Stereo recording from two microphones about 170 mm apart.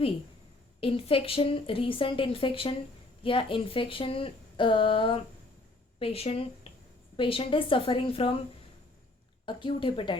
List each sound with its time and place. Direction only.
0.8 s a woman's voice: 35° left (ahead or behind)
9.5 s a woman's voice: 30° left (ahead or behind)